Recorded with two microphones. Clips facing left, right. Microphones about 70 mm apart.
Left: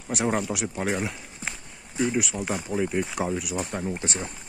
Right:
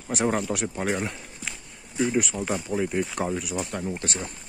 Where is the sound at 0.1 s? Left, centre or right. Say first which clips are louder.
Right 1 dB; centre.